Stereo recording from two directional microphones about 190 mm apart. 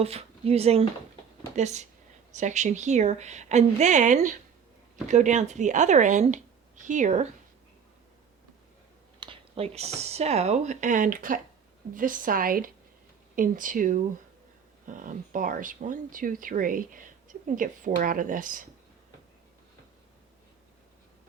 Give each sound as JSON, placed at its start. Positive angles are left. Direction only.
{"t": 0.0, "sound": "speech", "side_deg": -30}
{"t": 9.2, "sound": "speech", "side_deg": -30}